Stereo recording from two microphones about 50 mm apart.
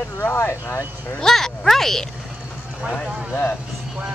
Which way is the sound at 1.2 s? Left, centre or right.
Centre.